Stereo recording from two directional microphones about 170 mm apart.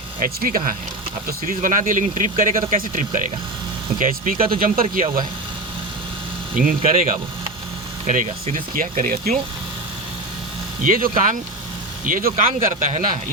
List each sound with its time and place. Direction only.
0.2 s speech: 55° right (ahead or behind)
6.6 s speech: 55° right (ahead or behind)
10.8 s speech: 55° right (ahead or behind)